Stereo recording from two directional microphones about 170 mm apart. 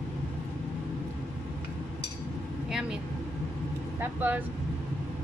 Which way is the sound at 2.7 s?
5° right (ahead or behind).